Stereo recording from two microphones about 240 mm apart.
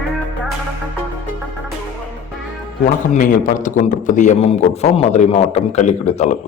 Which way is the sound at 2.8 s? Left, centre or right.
Left.